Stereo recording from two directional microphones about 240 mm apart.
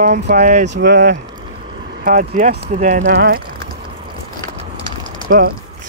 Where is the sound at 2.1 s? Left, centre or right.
Right.